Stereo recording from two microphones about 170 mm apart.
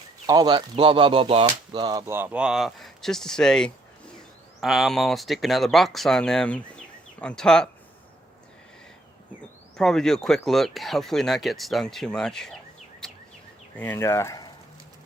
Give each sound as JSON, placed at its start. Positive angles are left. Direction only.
{"t": 0.3, "sound": "speech", "side_deg": -25}
{"t": 9.7, "sound": "speech", "side_deg": 0}
{"t": 13.0, "sound": "a sound", "side_deg": 0}
{"t": 13.7, "sound": "speech", "side_deg": 10}